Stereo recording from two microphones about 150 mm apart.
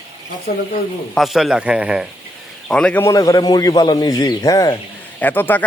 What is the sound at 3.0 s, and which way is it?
A man's voice, 20° left (ahead or behind).